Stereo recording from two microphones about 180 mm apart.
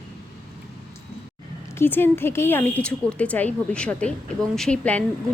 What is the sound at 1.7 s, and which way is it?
Speech, 10° left (ahead or behind).